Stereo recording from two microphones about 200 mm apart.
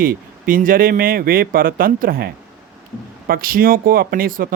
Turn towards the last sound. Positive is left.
turn(degrees=-45)  # may be behind; listen again after turning